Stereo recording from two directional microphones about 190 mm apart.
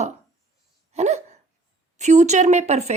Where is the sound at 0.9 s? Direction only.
35° right (ahead or behind).